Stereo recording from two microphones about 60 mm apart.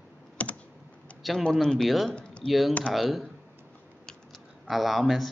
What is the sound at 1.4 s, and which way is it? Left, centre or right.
Speech, centre.